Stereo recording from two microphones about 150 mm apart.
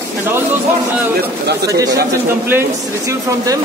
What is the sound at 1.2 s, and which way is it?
Speech, 90° right.